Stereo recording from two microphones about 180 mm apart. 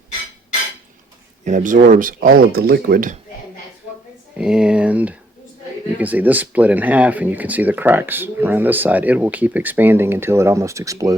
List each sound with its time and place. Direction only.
1.5 s speech: 45° right (ahead or behind)
4.4 s speech: 5° right (ahead or behind)